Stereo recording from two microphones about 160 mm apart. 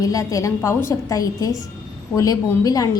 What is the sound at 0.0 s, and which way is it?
A woman's voice, 20° left (ahead or behind).